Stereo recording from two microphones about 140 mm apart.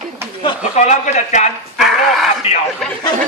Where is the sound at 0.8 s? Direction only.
55° left (ahead or behind).